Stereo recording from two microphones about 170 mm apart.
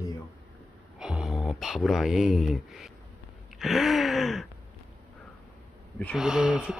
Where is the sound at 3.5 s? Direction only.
Centre (ahead or behind).